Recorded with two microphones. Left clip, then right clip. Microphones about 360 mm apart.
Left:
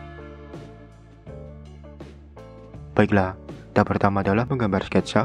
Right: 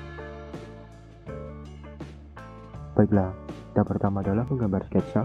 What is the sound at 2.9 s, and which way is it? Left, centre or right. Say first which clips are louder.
Speech: left 4 dB; centre.